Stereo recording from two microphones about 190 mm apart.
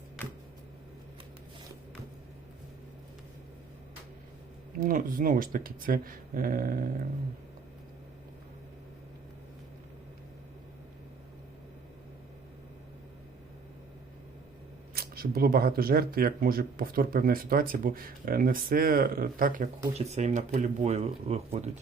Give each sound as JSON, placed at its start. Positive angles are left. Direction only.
{"t": 4.8, "sound": "speech", "side_deg": -45}
{"t": 14.9, "sound": "speech", "side_deg": -50}
{"t": 20.0, "sound": "speech", "side_deg": -35}